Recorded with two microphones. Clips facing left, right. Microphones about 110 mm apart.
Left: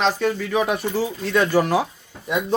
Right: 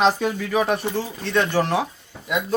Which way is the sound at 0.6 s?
5° left (ahead or behind).